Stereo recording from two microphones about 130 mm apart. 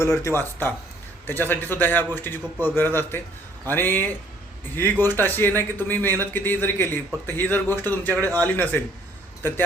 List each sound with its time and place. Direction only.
0.0 s speech: 20° left (ahead or behind)